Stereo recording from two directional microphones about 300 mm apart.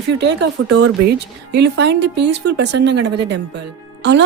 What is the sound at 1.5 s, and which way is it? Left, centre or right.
Speech, right.